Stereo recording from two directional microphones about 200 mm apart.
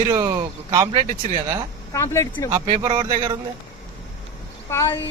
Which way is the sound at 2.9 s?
35° right (ahead or behind).